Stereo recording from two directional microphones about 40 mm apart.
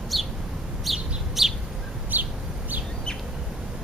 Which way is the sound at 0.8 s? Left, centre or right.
Centre.